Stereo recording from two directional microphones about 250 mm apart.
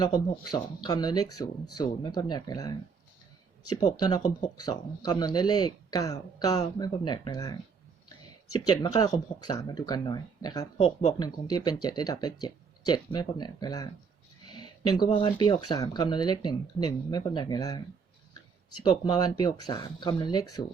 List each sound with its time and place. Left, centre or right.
0.0 s speech: centre
8.5 s speech: centre
18.8 s speech: centre